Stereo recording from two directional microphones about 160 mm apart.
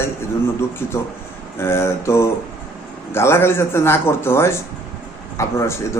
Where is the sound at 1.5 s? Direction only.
15° left (ahead or behind).